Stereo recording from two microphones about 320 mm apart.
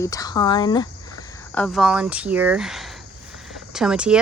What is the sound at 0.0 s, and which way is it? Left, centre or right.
Speech, centre.